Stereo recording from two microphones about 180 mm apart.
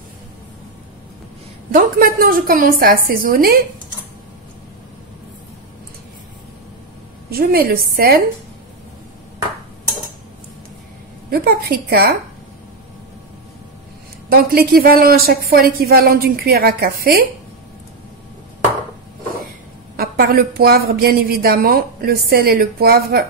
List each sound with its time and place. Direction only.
1.7 s a woman's voice: 50° right (ahead or behind)
7.2 s a woman's voice: 60° right (ahead or behind)
11.2 s a woman's voice: 55° right (ahead or behind)
14.3 s a woman's voice: 55° right (ahead or behind)
20.0 s a woman's voice: 60° right (ahead or behind)